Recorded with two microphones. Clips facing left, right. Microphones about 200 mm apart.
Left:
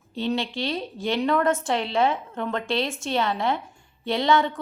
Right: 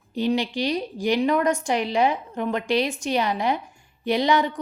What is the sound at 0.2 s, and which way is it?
A woman's voice, 15° right (ahead or behind).